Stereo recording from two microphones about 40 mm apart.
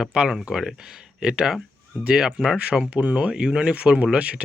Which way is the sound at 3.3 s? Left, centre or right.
Centre.